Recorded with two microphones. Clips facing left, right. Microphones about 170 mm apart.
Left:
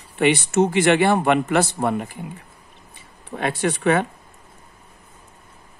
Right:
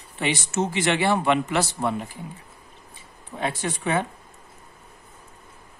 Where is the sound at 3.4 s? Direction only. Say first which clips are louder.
Left 6 dB; 65° left (ahead or behind).